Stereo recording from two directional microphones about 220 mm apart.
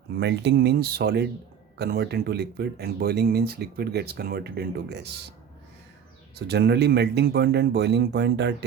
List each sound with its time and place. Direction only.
0.2 s speech: 50° right (ahead or behind)
6.5 s speech: 50° right (ahead or behind)